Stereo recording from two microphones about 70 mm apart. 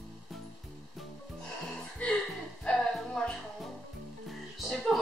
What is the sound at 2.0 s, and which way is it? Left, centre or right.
Chuckle, centre.